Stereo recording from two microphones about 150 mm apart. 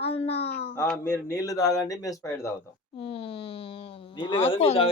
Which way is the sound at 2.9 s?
40° left (ahead or behind).